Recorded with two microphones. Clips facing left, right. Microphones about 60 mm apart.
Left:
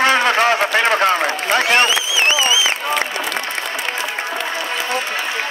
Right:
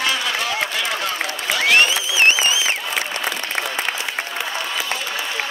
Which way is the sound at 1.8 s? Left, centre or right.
Right.